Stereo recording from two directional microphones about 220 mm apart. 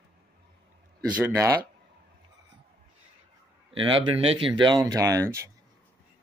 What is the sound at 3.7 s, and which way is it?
A man's voice, 25° right (ahead or behind).